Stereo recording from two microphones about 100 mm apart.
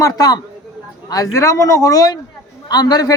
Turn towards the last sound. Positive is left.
turn(degrees=40)  # may be behind; listen again after turning